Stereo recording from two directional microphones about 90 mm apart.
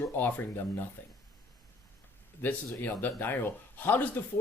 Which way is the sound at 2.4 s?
20° left (ahead or behind).